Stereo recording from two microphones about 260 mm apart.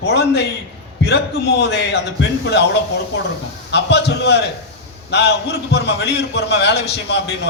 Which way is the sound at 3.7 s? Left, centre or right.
Left.